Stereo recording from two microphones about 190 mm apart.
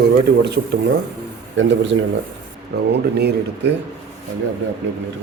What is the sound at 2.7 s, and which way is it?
Speech, 60° right (ahead or behind).